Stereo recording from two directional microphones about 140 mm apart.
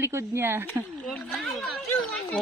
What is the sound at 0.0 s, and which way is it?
Speech, 20° right (ahead or behind).